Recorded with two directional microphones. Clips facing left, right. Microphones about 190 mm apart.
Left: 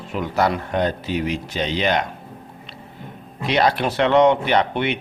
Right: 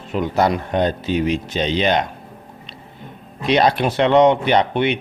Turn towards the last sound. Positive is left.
turn(degrees=-20)  # may be behind; listen again after turning